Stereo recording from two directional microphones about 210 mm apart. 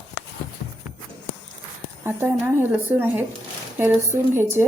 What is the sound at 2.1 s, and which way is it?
A woman's voice, 10° right (ahead or behind).